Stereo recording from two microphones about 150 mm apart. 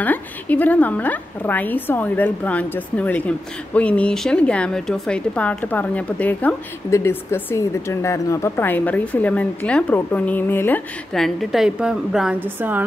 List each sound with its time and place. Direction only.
0.0 s a woman's voice: 10° left (ahead or behind)
11.1 s a woman's voice: centre (ahead or behind)